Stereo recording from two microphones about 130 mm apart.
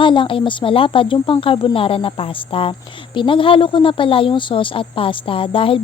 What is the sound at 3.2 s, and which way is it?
Speech, 40° left (ahead or behind).